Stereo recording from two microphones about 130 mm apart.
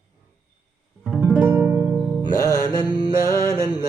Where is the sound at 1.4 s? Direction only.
15° right (ahead or behind).